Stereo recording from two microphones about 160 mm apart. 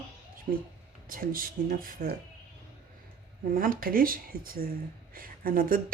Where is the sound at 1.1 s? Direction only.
65° right (ahead or behind).